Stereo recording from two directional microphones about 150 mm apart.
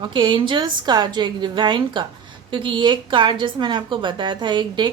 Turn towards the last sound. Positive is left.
turn(degrees=-30)  # may be behind; listen again after turning